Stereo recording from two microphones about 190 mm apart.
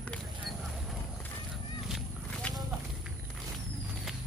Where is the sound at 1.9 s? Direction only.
5° left (ahead or behind).